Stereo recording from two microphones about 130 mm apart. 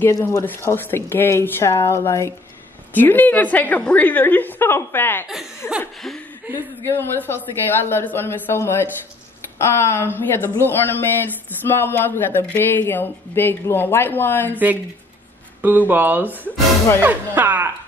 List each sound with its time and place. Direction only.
0.0 s speech: 15° left (ahead or behind)
6.8 s speech: 20° left (ahead or behind)
15.6 s speech: 15° right (ahead or behind)